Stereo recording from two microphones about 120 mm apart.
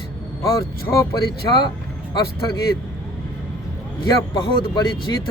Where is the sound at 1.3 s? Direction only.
35° left (ahead or behind).